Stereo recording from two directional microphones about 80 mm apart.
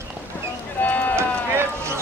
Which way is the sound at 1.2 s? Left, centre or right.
Right.